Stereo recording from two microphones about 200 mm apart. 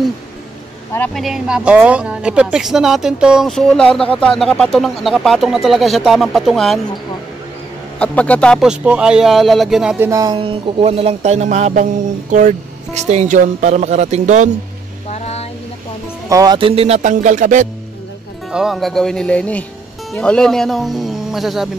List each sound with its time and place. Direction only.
0.9 s speech: 5° left (ahead or behind)
8.0 s speech: 5° left (ahead or behind)
10.0 s music: 20° right (ahead or behind); by 14.5 s 35° right (ahead or behind)
15.0 s a sound: 35° left (ahead or behind)
16.3 s music: 20° right (ahead or behind); by 17.6 s 40° right (ahead or behind)
18.5 s speech: centre (ahead or behind)